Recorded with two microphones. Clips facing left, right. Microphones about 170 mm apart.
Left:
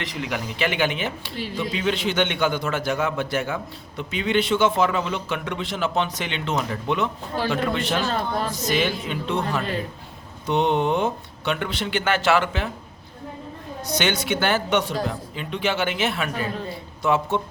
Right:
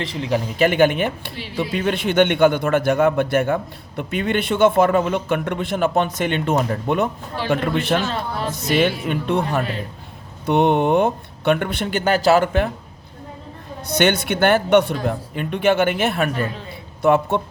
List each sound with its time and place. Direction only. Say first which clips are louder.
0.0 s a man's voice: right 6 dB; 30° right (ahead or behind)
0.6 s a man's voice: right 8 dB; 50° right (ahead or behind)
8.0 s speech: even; 40° left (ahead or behind)
8.7 s a man's voice: right 7 dB; 55° right (ahead or behind)
13.8 s a man's voice: right 6 dB; 55° right (ahead or behind)